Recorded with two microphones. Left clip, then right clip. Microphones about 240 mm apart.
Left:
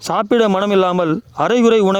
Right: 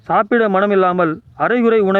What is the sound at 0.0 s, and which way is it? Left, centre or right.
Speech, left.